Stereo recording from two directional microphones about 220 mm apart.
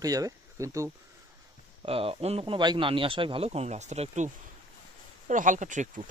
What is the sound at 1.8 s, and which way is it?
Speech, 25° right (ahead or behind).